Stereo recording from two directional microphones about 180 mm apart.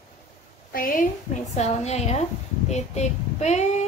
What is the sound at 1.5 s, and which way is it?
Female singing, 40° left (ahead or behind).